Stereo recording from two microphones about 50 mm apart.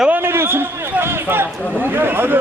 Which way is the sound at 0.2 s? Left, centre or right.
Right.